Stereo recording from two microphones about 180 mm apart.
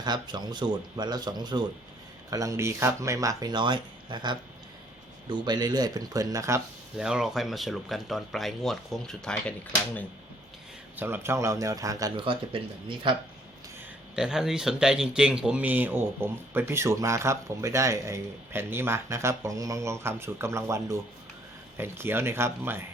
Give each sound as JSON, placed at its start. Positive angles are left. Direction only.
{"t": 0.0, "sound": "speech", "side_deg": -25}
{"t": 7.0, "sound": "speech", "side_deg": -5}
{"t": 10.9, "sound": "speech", "side_deg": -10}
{"t": 14.2, "sound": "speech", "side_deg": -5}